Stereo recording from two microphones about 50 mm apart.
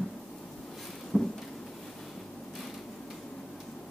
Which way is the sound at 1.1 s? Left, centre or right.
Centre.